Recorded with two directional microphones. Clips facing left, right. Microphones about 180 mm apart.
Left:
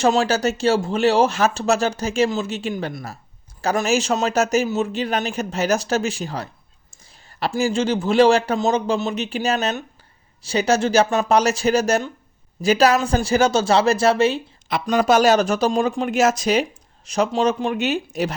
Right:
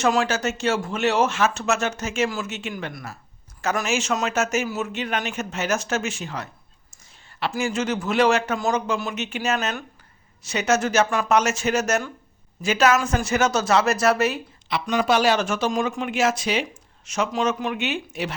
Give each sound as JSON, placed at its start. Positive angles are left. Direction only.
{"t": 0.0, "sound": "speech", "side_deg": 30}
{"t": 7.0, "sound": "a sound", "side_deg": 40}
{"t": 7.5, "sound": "speech", "side_deg": 30}
{"t": 14.7, "sound": "speech", "side_deg": 45}